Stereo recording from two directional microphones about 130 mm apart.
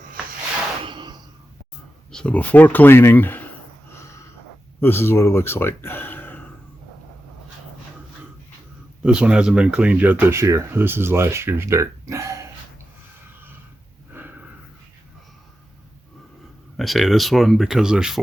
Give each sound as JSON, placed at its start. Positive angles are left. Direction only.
{"t": 0.9, "sound": "a sound", "side_deg": -35}
{"t": 2.1, "sound": "speech", "side_deg": 10}
{"t": 4.8, "sound": "speech", "side_deg": 15}
{"t": 9.0, "sound": "speech", "side_deg": -5}
{"t": 14.1, "sound": "snort", "side_deg": -15}
{"t": 16.7, "sound": "speech", "side_deg": 0}